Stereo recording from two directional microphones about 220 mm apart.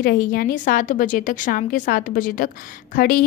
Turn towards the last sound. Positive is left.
turn(degrees=40)  # may be behind; listen again after turning